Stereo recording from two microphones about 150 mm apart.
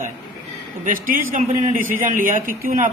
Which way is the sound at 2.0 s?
65° right (ahead or behind).